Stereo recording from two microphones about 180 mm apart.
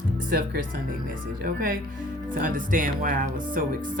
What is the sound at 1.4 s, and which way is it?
Speech, 50° right (ahead or behind).